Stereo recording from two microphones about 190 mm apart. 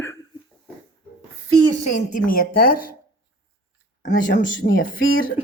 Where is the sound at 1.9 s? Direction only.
45° left (ahead or behind).